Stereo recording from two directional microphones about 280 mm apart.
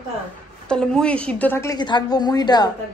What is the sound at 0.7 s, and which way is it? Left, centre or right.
A woman's voice, centre.